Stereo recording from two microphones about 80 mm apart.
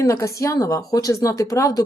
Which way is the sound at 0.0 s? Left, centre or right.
Left.